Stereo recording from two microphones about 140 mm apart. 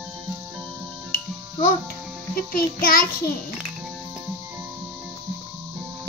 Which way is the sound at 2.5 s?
90° left.